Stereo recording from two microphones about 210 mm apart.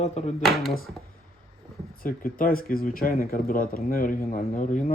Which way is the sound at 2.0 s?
40° left (ahead or behind).